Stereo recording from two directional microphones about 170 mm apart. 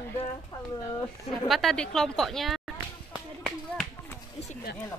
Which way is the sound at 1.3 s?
Centre (ahead or behind).